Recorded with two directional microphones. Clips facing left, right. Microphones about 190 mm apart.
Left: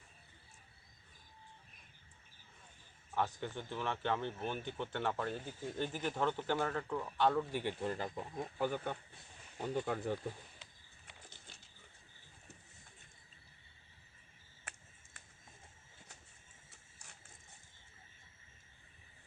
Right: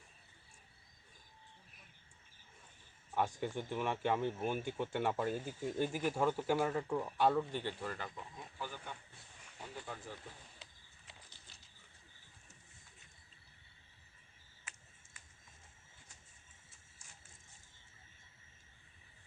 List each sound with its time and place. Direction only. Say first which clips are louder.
3.2 s speech: right 2 dB; 10° right (ahead or behind)
7.5 s speech: left 3 dB; 15° left (ahead or behind)
7.9 s speech: left 6 dB; 35° left (ahead or behind)
8.5 s speech: left 10 dB; 55° left (ahead or behind)